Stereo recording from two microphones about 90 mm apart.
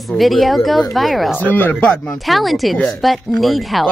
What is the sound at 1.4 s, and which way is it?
Speech, 20° left (ahead or behind).